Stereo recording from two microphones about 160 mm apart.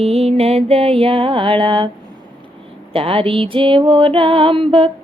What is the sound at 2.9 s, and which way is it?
Music, 35° right (ahead or behind).